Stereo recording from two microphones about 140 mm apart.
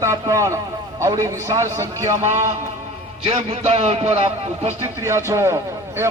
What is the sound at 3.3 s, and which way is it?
A man's voice, 45° right (ahead or behind).